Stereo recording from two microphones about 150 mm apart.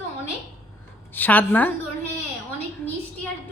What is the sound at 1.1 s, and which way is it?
Speech, 10° left (ahead or behind).